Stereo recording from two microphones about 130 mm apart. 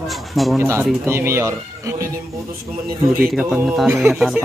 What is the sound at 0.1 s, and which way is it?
Speech, centre (ahead or behind).